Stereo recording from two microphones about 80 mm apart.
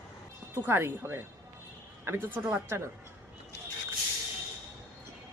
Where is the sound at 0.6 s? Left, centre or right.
Right.